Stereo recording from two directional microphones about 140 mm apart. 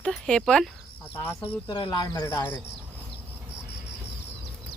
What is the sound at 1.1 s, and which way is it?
Speech, 15° left (ahead or behind).